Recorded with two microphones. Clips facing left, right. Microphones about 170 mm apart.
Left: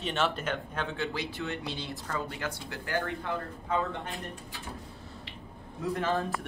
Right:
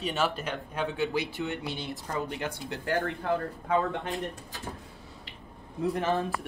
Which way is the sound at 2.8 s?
35° right (ahead or behind).